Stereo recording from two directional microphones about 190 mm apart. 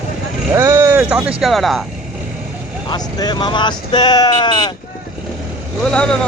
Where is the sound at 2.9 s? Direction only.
20° left (ahead or behind).